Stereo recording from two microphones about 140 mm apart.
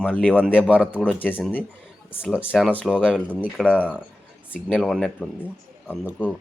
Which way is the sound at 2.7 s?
10° left (ahead or behind).